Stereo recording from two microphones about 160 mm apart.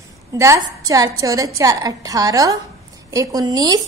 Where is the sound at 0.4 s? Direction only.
20° right (ahead or behind).